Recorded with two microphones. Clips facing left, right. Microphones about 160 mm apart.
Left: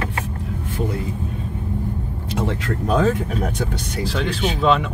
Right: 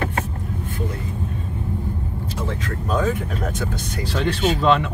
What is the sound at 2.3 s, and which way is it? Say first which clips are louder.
Vehicle: left 6 dB; 70° left (ahead or behind).